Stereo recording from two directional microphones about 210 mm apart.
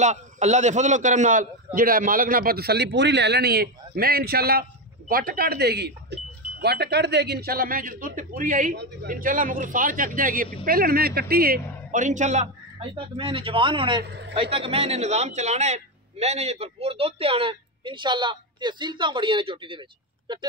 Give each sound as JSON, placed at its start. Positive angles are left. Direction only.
{"t": 0.0, "sound": "a man's voice", "side_deg": -35}
{"t": 14.0, "sound": "a man's voice", "side_deg": -55}
{"t": 14.3, "sound": "a man's voice", "side_deg": -25}